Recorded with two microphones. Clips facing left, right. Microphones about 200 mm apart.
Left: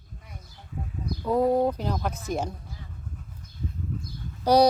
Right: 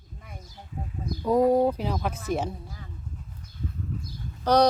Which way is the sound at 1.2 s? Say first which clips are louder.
Right 2 dB; 10° right (ahead or behind).